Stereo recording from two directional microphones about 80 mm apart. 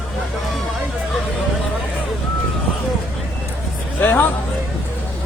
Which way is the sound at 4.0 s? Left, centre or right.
Left.